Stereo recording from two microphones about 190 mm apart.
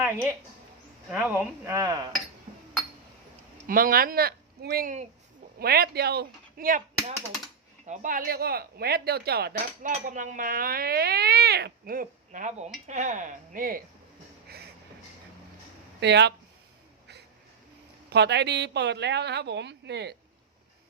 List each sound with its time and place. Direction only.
0.0 s speech: 10° right (ahead or behind)
3.7 s a woman's voice: 50° right (ahead or behind)
7.9 s speech: 45° right (ahead or behind)
14.4 s a sound: 55° right (ahead or behind)
16.0 s a woman's voice: 65° right (ahead or behind)
18.1 s a woman's voice: 65° right (ahead or behind)